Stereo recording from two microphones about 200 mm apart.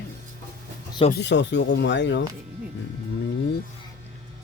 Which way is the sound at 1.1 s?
60° left (ahead or behind).